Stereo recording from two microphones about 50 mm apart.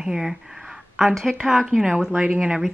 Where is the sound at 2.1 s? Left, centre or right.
Centre.